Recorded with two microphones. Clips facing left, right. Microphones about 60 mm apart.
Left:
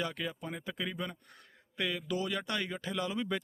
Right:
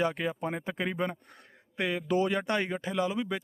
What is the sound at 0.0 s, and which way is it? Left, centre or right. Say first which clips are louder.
Speech: right 7 dB; right.